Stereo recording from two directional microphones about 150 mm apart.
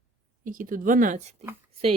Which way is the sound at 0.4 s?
60° right (ahead or behind).